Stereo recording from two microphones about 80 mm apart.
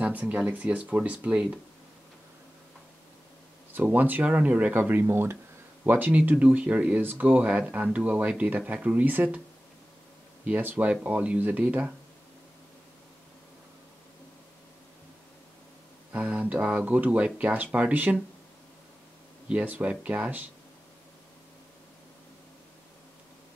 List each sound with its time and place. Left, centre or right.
0.0 s speech: centre
3.7 s speech: right
10.4 s speech: right
16.1 s speech: centre
19.5 s speech: centre